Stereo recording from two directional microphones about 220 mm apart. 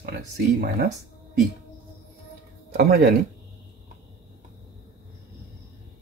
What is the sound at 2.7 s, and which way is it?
Speech, 45° right (ahead or behind).